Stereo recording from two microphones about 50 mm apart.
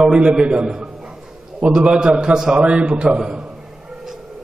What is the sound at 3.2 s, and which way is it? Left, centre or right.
Speech, centre.